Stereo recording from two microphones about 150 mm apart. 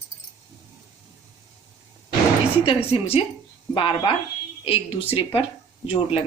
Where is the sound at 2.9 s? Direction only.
35° left (ahead or behind).